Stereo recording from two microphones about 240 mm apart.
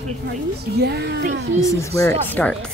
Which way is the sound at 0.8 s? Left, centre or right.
Right.